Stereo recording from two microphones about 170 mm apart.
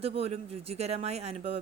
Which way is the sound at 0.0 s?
35° right (ahead or behind).